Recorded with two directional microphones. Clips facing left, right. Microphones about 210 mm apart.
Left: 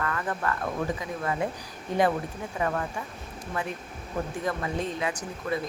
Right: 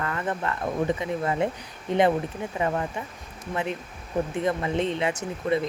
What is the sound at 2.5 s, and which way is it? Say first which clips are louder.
Speech: right 2 dB; 20° right (ahead or behind).